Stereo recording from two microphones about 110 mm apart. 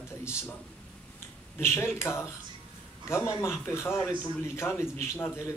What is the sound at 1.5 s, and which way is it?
A man's voice, 25° left (ahead or behind).